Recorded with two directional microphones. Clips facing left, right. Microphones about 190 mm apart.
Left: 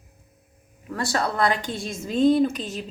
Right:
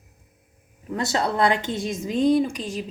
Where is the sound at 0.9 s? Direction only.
20° right (ahead or behind).